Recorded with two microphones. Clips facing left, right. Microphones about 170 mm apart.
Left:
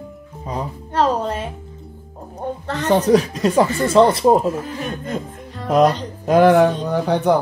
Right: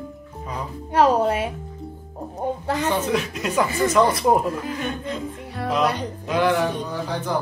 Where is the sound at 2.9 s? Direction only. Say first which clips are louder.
Left 12 dB; 35° left (ahead or behind).